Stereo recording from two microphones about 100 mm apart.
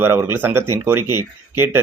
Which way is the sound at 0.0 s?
25° right (ahead or behind).